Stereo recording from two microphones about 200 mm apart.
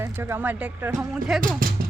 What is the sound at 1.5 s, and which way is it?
Music, 45° right (ahead or behind).